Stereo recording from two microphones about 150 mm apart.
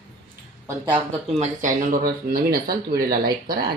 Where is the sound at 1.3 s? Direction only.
60° right (ahead or behind).